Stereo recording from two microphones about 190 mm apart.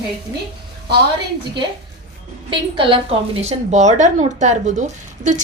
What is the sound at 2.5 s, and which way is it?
A woman's voice, 25° right (ahead or behind).